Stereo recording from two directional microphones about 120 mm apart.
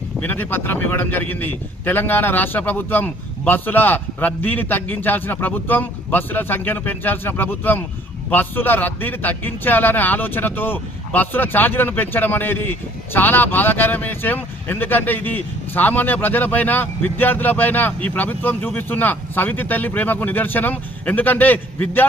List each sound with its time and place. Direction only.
0.2 s a man's voice: 15° left (ahead or behind)